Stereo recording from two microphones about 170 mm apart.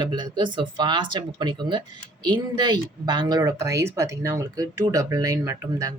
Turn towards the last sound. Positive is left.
turn(degrees=-20)  # may be behind; listen again after turning